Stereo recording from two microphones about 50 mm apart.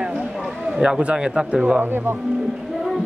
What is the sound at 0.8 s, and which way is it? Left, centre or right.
Speech, centre.